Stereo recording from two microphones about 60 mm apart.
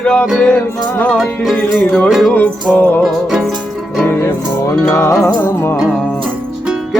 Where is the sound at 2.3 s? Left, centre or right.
Left.